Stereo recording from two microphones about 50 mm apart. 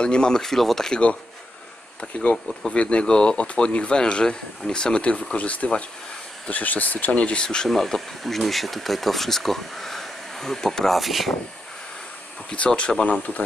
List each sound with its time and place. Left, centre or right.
0.0 s speech: centre
2.7 s speech: left
11.0 s speech: centre
12.4 s speech: left